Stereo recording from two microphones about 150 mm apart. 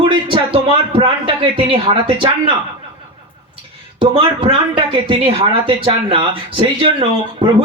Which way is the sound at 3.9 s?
35° right (ahead or behind).